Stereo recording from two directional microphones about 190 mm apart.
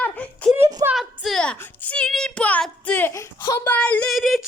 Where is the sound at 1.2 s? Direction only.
Centre (ahead or behind).